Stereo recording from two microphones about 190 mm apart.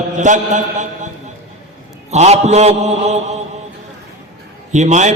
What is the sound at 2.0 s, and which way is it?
A man's voice, 35° right (ahead or behind).